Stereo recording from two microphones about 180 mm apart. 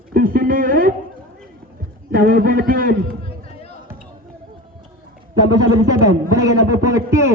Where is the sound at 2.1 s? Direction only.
50° right (ahead or behind).